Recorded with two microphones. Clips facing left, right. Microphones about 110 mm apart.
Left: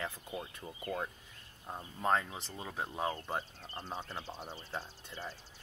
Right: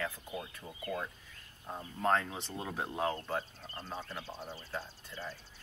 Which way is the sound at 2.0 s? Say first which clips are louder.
Right 1 dB; 5° left (ahead or behind).